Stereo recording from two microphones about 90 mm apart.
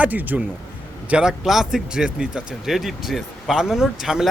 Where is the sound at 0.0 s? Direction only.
20° right (ahead or behind).